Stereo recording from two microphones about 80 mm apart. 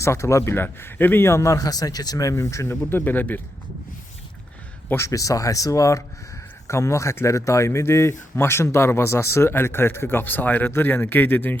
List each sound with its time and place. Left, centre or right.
0.0 s speech: left
1.3 s speech: left
2.9 s a man's voice: left
4.9 s speech: left